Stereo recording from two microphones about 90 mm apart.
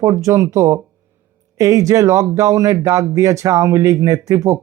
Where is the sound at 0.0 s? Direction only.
40° right (ahead or behind).